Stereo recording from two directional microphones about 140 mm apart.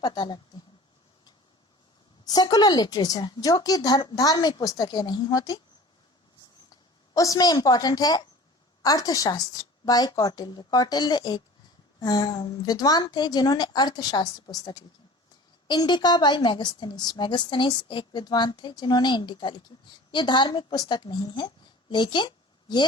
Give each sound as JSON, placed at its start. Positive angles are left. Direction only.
{"t": 0.0, "sound": "a woman's voice", "side_deg": 30}
{"t": 2.2, "sound": "a woman's voice", "side_deg": 30}
{"t": 7.1, "sound": "a woman's voice", "side_deg": 25}